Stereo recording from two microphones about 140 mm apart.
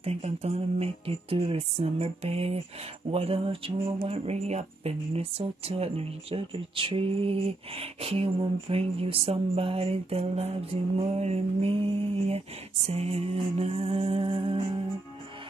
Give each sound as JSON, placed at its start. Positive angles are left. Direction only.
{"t": 0.0, "sound": "speech", "side_deg": -50}